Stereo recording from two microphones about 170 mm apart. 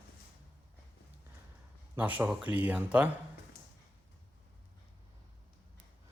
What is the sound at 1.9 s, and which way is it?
A man's voice, 10° right (ahead or behind).